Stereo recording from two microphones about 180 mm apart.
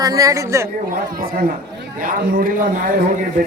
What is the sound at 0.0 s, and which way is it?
Speech, 20° right (ahead or behind).